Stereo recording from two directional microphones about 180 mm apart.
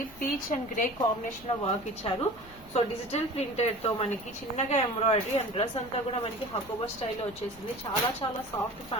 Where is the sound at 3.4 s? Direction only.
35° left (ahead or behind).